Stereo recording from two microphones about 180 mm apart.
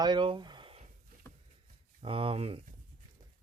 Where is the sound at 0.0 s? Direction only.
25° right (ahead or behind).